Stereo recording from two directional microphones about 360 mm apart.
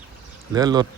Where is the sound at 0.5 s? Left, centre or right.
Centre.